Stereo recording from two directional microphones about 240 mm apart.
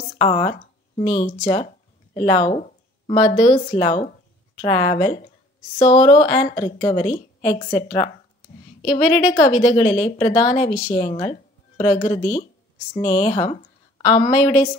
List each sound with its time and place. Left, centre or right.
0.2 s a woman's voice: centre